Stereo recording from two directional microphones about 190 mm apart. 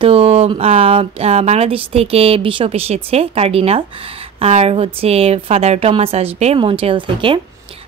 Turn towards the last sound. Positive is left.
turn(degrees=-25)  # may be behind; listen again after turning